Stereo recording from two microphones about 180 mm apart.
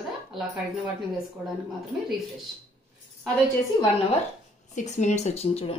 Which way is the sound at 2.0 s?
Centre (ahead or behind).